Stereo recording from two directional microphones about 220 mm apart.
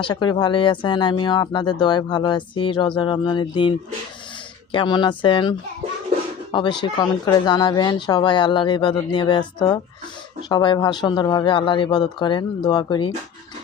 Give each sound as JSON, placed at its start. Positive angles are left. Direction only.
{"t": 0.0, "sound": "speech", "side_deg": 20}